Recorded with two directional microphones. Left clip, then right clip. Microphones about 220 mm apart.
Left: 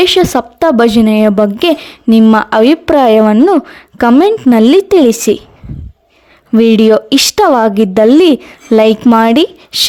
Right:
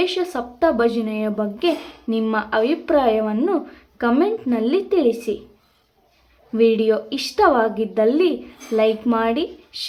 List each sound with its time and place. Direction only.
0.0 s a woman's voice: 55° left (ahead or behind)
6.5 s a woman's voice: 55° left (ahead or behind)